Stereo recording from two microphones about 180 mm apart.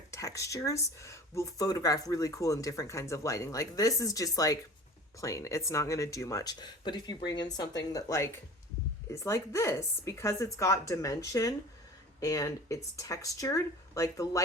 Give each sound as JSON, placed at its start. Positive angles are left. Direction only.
{"t": 0.1, "sound": "speech", "side_deg": 15}